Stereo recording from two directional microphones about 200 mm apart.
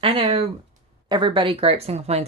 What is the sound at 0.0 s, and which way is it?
Speech, 30° right (ahead or behind).